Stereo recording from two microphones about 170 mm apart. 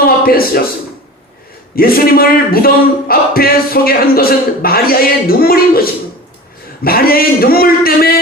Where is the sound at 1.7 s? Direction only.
60° left (ahead or behind).